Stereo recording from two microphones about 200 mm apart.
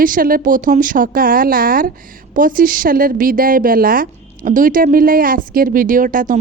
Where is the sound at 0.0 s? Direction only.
45° right (ahead or behind).